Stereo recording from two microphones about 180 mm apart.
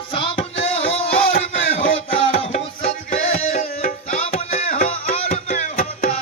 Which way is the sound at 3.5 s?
40° left (ahead or behind).